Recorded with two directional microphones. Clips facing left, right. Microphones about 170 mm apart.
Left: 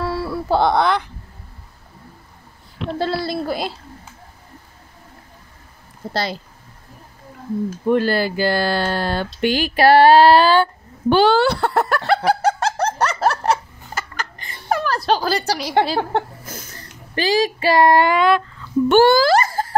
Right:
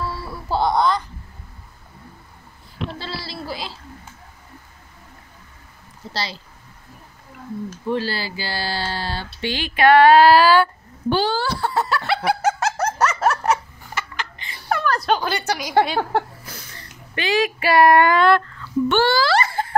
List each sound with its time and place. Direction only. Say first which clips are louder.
0.0 s a sound: left 7 dB; 65° left (ahead or behind)
3.0 s speech: left 10 dB; 55° left (ahead or behind)
6.0 s speech: left 7 dB; 50° left (ahead or behind)
7.8 s speech: left 7 dB; 50° left (ahead or behind); by 10.7 s 25° left (ahead or behind)
11.1 s speech: left 7 dB; 70° left (ahead or behind)
12.0 s laughter: left 3 dB; 40° left (ahead or behind)
15.0 s speech: left 5 dB; 35° left (ahead or behind)
16.4 s speech: left 4 dB; 45° left (ahead or behind); by 18.7 s 15° left (ahead or behind)
18.9 s speech: left 6 dB; 45° left (ahead or behind)